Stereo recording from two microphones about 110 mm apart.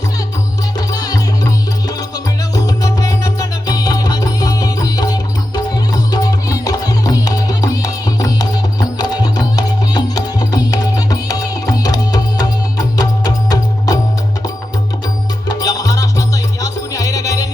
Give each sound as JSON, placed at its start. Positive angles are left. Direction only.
{"t": 0.8, "sound": "music", "side_deg": 35}
{"t": 15.4, "sound": "music", "side_deg": 35}